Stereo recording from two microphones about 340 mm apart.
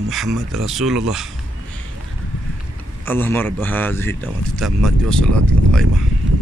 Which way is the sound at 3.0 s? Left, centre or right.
Centre.